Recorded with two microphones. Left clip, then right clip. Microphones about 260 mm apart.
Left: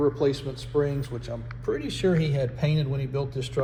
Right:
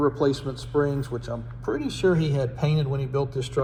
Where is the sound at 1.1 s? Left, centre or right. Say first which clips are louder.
Right 5 dB; right.